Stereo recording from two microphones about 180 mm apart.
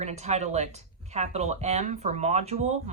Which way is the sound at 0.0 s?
40° right (ahead or behind).